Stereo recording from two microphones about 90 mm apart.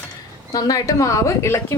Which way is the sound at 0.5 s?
45° left (ahead or behind).